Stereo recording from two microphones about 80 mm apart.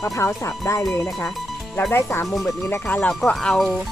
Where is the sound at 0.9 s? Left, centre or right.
Centre.